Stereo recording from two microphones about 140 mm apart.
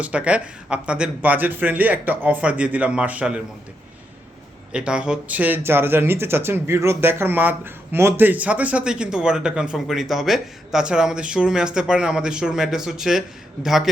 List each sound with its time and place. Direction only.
0.0 s speech: 10° right (ahead or behind)
4.7 s speech: 5° right (ahead or behind)